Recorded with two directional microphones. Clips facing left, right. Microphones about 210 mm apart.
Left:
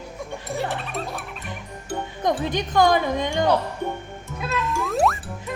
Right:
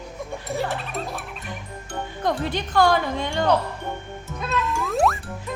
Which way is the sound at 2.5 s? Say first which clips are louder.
Left 1 dB; 20° left (ahead or behind).